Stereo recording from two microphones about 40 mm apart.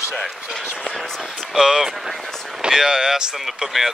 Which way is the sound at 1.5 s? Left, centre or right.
Centre.